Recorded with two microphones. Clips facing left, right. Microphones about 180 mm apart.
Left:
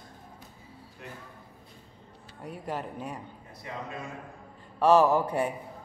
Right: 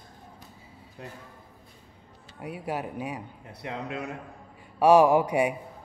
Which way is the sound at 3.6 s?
70° right (ahead or behind).